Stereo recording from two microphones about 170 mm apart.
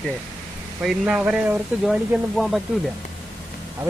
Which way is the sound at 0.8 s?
5° right (ahead or behind).